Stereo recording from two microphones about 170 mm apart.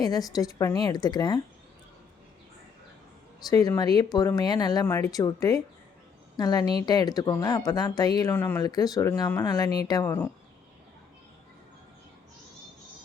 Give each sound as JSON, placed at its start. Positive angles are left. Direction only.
{"t": 0.0, "sound": "speech", "side_deg": 25}
{"t": 3.4, "sound": "speech", "side_deg": 20}